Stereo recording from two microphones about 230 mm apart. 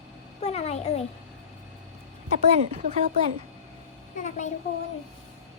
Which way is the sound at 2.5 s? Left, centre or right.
Right.